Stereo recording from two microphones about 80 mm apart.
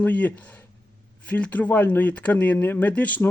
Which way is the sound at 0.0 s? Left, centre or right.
Left.